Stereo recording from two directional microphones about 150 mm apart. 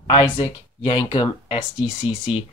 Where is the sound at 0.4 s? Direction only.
25° left (ahead or behind).